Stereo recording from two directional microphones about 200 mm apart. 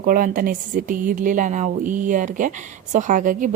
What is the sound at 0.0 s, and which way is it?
A woman's voice, 45° right (ahead or behind).